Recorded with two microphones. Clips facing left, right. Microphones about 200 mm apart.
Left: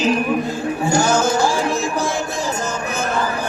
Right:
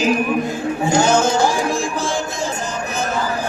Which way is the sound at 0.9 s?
20° right (ahead or behind).